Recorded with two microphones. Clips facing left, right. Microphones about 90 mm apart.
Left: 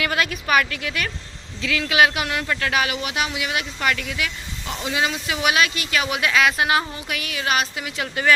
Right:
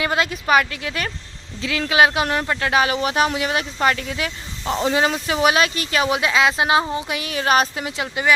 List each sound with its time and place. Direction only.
0.0 s speech: 25° right (ahead or behind)